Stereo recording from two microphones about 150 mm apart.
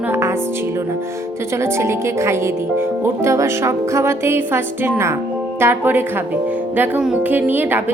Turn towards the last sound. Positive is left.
turn(degrees=-10)  # may be behind; listen again after turning